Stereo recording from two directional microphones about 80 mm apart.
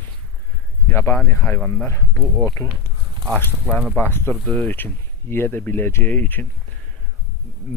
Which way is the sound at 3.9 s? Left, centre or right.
Left.